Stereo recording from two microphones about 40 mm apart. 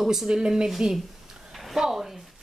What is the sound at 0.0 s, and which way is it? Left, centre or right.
A woman's voice, centre.